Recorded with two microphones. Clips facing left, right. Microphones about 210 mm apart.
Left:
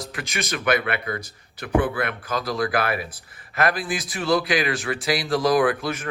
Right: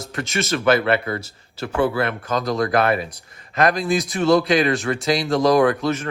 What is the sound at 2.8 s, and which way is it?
Speech, 25° right (ahead or behind).